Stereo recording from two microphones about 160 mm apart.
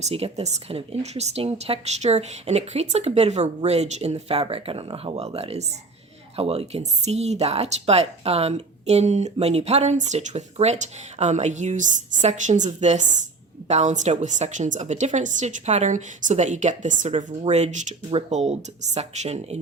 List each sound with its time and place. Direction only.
0.0 s a woman's voice: 40° right (ahead or behind)